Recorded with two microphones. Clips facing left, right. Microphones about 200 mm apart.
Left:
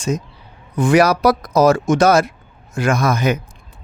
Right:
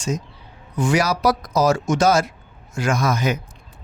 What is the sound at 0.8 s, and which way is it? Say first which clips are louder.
A man's voice: left 6 dB; 55° left (ahead or behind).